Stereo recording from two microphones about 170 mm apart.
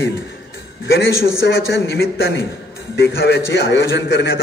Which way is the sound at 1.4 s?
75° left (ahead or behind).